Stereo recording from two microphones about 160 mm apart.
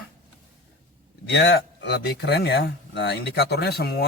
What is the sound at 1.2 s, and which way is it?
Speech, 90° left.